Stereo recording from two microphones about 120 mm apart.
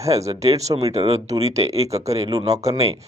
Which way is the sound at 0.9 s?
55° right (ahead or behind).